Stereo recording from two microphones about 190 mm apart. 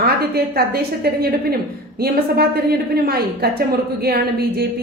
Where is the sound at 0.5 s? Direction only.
55° right (ahead or behind).